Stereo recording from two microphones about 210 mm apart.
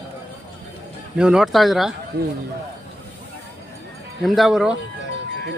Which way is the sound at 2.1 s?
45° right (ahead or behind).